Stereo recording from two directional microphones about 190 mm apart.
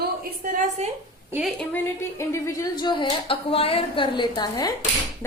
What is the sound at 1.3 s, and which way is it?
Speech, 5° right (ahead or behind).